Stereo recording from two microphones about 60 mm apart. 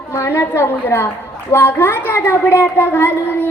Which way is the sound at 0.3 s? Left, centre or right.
Left.